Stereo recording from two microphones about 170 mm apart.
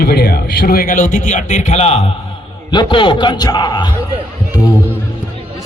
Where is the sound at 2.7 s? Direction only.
30° left (ahead or behind).